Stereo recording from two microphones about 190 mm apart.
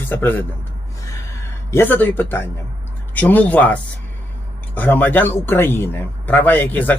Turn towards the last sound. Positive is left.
turn(degrees=10)  # may be behind; listen again after turning